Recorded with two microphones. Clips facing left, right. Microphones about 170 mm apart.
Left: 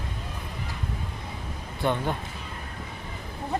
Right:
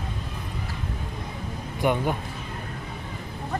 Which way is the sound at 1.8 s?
10° right (ahead or behind).